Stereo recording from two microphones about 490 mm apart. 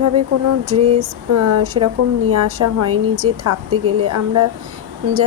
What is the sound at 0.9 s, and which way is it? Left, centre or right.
Speech, right.